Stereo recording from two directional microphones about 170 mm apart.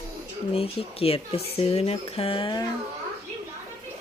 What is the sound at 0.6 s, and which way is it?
Speech, 35° left (ahead or behind).